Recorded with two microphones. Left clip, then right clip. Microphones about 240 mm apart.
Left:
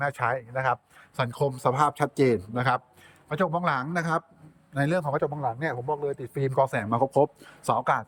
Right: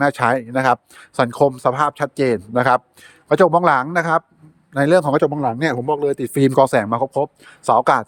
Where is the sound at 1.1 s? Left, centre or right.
Centre.